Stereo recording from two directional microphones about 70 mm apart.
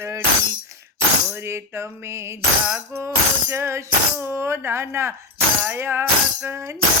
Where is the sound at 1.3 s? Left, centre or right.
Right.